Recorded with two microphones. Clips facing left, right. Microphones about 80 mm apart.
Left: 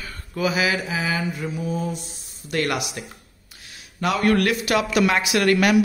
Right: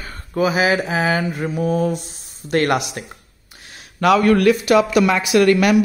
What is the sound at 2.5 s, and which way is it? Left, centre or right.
Speech, right.